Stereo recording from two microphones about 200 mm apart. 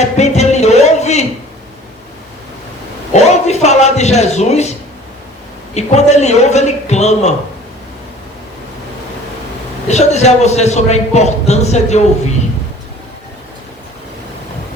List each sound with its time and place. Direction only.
0.0 s music: 35° left (ahead or behind)
3.1 s a sound: 35° left (ahead or behind)
5.7 s a man's voice: 35° left (ahead or behind)
9.9 s a man's voice: 35° left (ahead or behind)